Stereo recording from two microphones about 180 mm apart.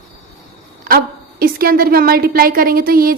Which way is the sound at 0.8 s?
55° right (ahead or behind).